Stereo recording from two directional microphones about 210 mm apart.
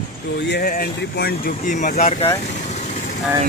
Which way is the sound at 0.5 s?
45° left (ahead or behind).